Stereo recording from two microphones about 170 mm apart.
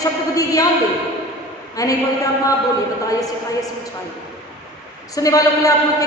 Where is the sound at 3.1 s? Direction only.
20° left (ahead or behind).